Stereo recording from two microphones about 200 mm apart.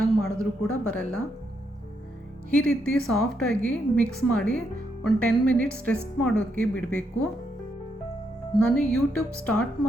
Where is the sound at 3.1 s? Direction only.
5° left (ahead or behind).